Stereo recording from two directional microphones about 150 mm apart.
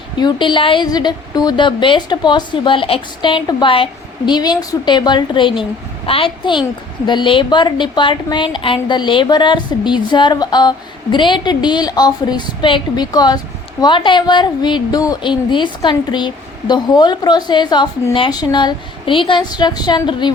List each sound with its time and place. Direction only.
0.2 s a woman's voice: 30° left (ahead or behind)